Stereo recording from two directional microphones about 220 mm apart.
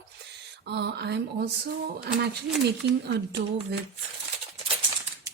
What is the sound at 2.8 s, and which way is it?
Speech, 50° right (ahead or behind).